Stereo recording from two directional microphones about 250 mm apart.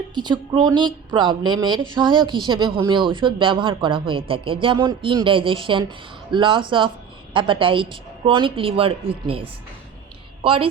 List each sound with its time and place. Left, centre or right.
0.1 s speech: centre